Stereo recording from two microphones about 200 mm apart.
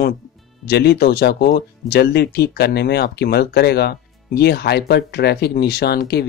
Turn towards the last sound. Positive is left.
turn(degrees=55)  # may be behind; listen again after turning